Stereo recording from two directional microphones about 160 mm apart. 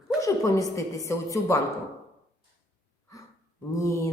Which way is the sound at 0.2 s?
20° left (ahead or behind).